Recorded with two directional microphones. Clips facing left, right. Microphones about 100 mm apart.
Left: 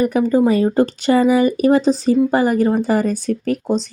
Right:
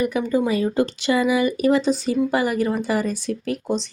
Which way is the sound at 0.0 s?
40° left (ahead or behind).